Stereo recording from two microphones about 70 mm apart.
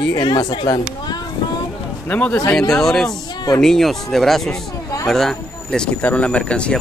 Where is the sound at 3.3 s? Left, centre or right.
Left.